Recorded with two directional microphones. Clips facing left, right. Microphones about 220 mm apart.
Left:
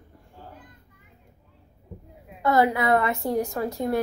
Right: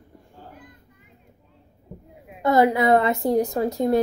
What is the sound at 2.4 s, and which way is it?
A woman's voice, 20° right (ahead or behind).